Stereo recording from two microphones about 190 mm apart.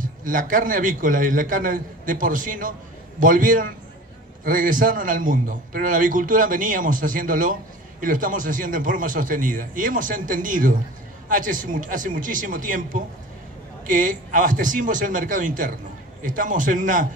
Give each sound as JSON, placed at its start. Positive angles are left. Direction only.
{"t": 0.0, "sound": "a man's voice", "side_deg": -45}